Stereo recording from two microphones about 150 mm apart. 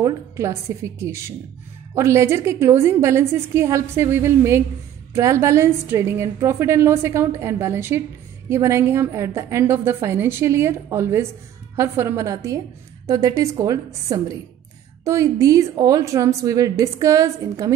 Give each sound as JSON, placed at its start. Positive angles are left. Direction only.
{"t": 0.0, "sound": "a woman's voice", "side_deg": -20}